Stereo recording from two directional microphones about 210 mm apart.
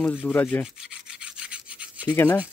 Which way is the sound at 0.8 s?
5° right (ahead or behind).